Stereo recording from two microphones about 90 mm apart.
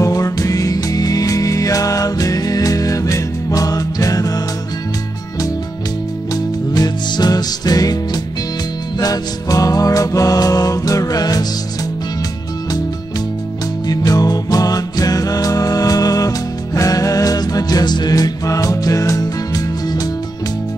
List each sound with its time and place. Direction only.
0.0 s music: 40° left (ahead or behind)
6.3 s music: 45° left (ahead or behind)
13.8 s music: 45° left (ahead or behind)